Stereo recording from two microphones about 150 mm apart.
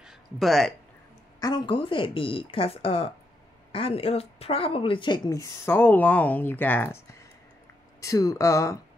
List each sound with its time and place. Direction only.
0.0 s a sound: centre (ahead or behind)
1.4 s speech: 30° left (ahead or behind); by 7.0 s 10° left (ahead or behind)
8.0 s speech: 25° left (ahead or behind)